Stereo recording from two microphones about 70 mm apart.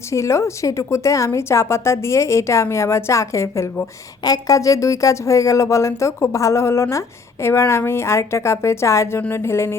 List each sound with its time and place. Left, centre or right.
0.1 s a woman's voice: left
4.2 s a woman's voice: left